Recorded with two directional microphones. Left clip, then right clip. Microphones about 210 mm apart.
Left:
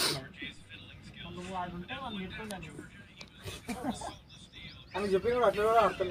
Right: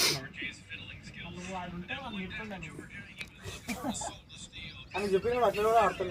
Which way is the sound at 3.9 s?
20° right (ahead or behind).